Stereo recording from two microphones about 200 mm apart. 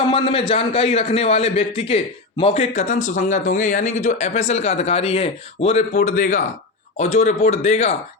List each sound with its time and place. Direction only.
0.0 s a man's voice: 25° left (ahead or behind)